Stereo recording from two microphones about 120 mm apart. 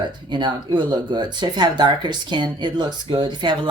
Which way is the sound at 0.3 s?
40° right (ahead or behind).